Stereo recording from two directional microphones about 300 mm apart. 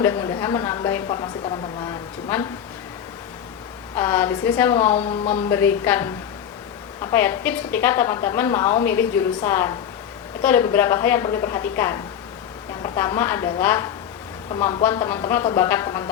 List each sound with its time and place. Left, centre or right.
0.0 s a woman's voice: centre
3.9 s a woman's voice: centre
4.9 s speech: left
5.5 s a woman's voice: centre